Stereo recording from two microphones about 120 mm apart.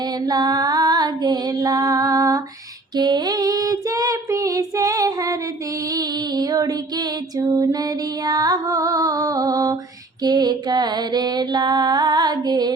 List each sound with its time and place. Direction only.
0.3 s female singing: 35° right (ahead or behind)
2.9 s child singing: 35° right (ahead or behind)
5.9 s female singing: 30° right (ahead or behind)